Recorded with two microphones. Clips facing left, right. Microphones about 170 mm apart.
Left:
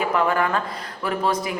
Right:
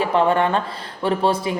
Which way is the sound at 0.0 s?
30° right (ahead or behind).